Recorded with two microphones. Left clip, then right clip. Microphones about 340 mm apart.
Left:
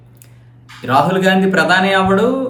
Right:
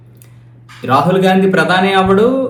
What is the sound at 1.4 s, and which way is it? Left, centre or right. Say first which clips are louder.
Speech: right 1 dB; centre.